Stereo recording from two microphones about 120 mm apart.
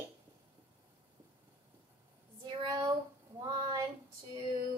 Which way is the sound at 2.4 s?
35° right (ahead or behind).